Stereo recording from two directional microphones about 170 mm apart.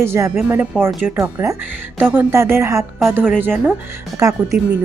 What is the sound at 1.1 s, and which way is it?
Speech, 15° right (ahead or behind).